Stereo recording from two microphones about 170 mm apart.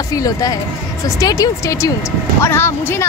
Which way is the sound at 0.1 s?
20° left (ahead or behind).